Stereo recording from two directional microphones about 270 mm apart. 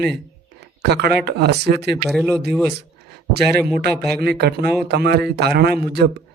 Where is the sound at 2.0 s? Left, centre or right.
Centre.